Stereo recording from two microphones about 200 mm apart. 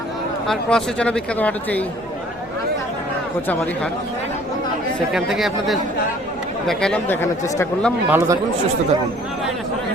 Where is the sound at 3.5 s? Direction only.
5° left (ahead or behind).